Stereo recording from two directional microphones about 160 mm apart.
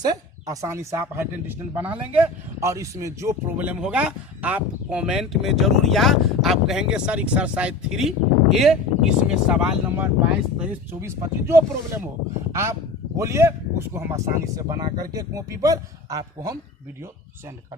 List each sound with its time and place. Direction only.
0.0 s speech: 25° right (ahead or behind)
13.1 s speech: 20° right (ahead or behind)